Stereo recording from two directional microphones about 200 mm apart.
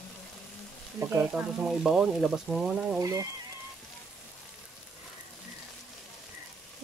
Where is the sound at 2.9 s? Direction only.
15° right (ahead or behind).